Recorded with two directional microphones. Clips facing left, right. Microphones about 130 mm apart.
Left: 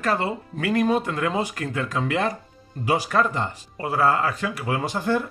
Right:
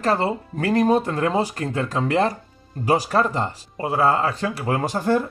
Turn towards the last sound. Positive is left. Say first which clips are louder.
# right 3 dB
turn(degrees=-40)  # may be behind; listen again after turning